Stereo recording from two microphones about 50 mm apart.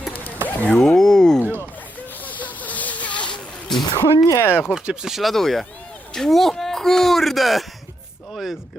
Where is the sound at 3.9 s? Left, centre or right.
Left.